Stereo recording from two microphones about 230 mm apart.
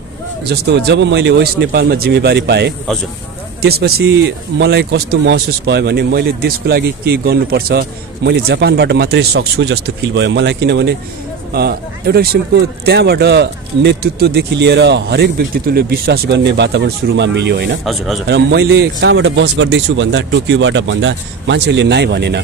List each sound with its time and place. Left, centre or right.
0.4 s a man's voice: right
17.8 s speech: centre
18.2 s a man's voice: right